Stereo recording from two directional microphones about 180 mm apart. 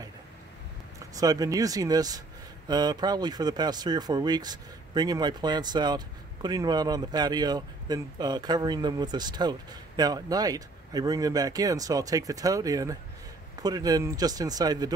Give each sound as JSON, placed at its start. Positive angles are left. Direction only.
{"t": 0.9, "sound": "speech", "side_deg": -20}